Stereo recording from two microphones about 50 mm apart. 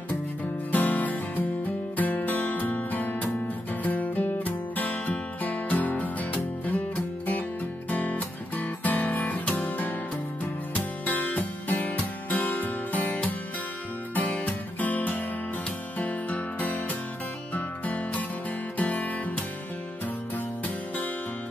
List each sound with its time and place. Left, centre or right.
0.7 s music: left
7.9 s music: left
14.4 s music: left